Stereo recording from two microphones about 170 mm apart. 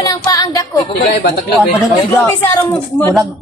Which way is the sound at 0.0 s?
20° left (ahead or behind).